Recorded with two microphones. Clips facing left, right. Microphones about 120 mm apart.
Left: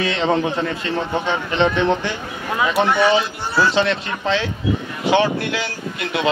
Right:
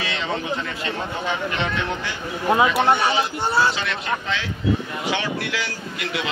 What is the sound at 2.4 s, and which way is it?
Speech, 25° right (ahead or behind).